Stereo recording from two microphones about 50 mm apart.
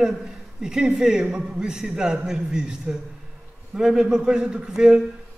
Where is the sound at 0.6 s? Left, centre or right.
Centre.